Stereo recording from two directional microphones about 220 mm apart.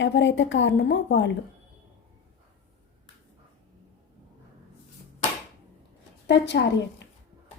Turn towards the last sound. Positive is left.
turn(degrees=50)  # may be behind; listen again after turning